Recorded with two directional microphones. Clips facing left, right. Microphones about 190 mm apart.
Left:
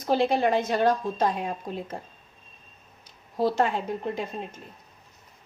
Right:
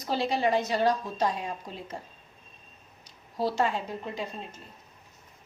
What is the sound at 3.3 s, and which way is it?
A woman's voice, 55° left (ahead or behind).